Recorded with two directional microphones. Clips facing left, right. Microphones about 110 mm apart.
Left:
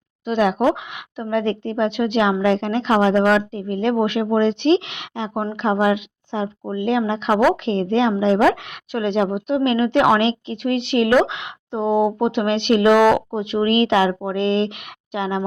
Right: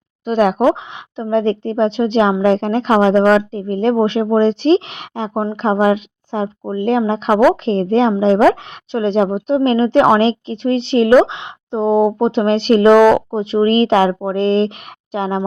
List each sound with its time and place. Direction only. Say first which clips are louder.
0.3 s speech: right 4 dB; 45° right (ahead or behind)
0.6 s a woman's voice: right 4 dB; 30° right (ahead or behind)